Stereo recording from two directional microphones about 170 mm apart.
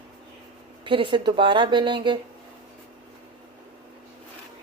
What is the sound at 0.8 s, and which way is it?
A woman's voice, 30° right (ahead or behind).